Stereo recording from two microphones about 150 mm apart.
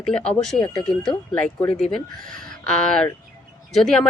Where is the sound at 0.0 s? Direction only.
5° left (ahead or behind).